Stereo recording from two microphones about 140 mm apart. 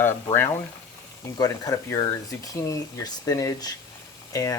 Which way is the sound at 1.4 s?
25° left (ahead or behind).